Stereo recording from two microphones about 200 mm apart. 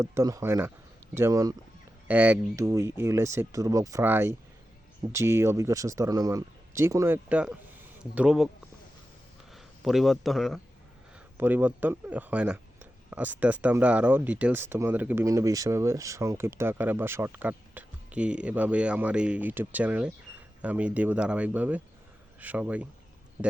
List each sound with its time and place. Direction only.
0.0 s speech: 15° right (ahead or behind)
9.5 s speech: centre (ahead or behind)